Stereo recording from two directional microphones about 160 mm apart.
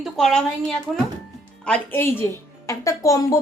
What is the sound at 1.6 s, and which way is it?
Speech, 10° left (ahead or behind).